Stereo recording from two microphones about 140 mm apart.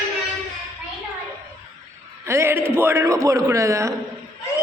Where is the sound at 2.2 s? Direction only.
20° right (ahead or behind).